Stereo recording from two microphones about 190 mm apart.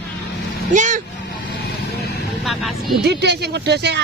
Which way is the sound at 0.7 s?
40° right (ahead or behind).